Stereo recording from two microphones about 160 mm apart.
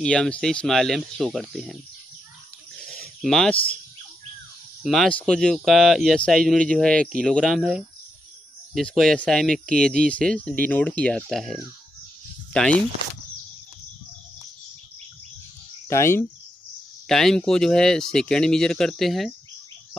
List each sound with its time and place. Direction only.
0.0 s speech: 5° left (ahead or behind)
2.8 s a sound: 5° left (ahead or behind)
4.8 s speech: 5° left (ahead or behind)
15.9 s speech: 15° left (ahead or behind)
17.1 s speech: centre (ahead or behind)